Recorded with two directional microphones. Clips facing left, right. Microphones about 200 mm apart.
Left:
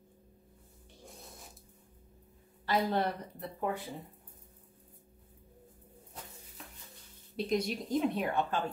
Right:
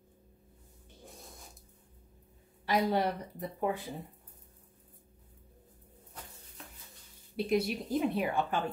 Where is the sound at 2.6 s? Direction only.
15° right (ahead or behind).